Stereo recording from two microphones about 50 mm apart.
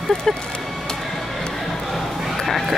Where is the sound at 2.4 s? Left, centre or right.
Centre.